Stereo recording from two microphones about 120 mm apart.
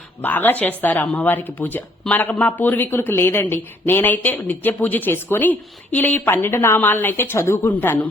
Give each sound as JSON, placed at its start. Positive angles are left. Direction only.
{"t": 0.2, "sound": "speech", "side_deg": 15}